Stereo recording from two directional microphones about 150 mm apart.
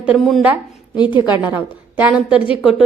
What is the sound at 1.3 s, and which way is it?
A woman's voice, 10° right (ahead or behind).